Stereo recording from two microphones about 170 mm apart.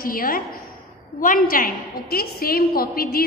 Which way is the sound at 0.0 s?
55° left (ahead or behind).